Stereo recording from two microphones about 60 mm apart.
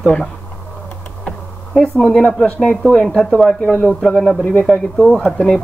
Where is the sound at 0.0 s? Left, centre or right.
Centre.